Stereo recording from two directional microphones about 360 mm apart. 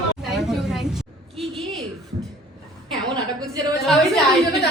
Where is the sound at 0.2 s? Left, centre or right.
Centre.